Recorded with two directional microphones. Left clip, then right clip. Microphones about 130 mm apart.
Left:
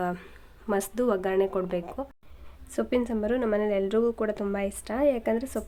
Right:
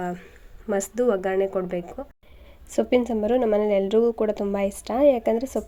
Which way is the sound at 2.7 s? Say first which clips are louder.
Right 6 dB; 25° right (ahead or behind).